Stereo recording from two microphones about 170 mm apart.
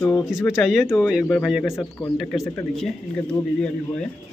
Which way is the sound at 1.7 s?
15° left (ahead or behind).